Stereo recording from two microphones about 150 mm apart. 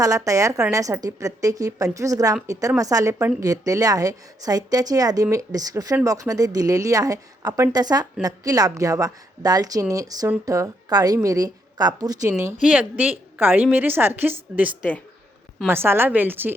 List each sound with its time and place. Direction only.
0.0 s a woman's voice: 20° right (ahead or behind)
12.6 s a woman's voice: 10° right (ahead or behind)